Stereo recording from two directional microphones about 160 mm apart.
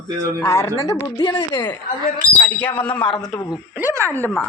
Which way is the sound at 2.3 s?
10° left (ahead or behind).